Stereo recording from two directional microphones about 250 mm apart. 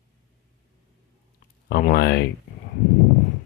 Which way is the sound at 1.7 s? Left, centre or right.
Left.